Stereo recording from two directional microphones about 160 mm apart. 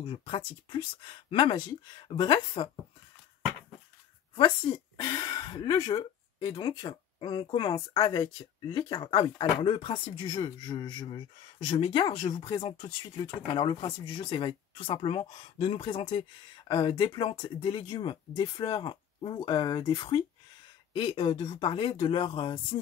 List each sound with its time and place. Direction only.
0.0 s speech: 35° left (ahead or behind)
4.4 s speech: 30° left (ahead or behind)